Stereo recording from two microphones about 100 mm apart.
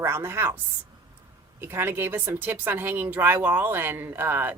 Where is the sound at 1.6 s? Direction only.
25° right (ahead or behind).